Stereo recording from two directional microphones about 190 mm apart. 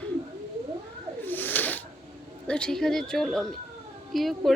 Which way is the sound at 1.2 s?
10° left (ahead or behind).